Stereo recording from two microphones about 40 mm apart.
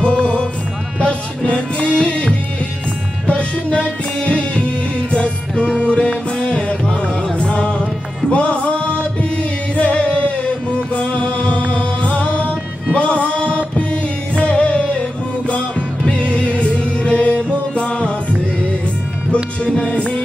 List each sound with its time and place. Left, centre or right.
0.0 s music: left
8.3 s chant: left
11.0 s music: left
19.9 s music: left